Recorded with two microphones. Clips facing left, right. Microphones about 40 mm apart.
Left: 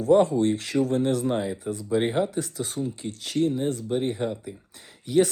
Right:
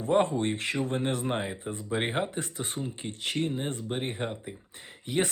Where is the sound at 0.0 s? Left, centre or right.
Right.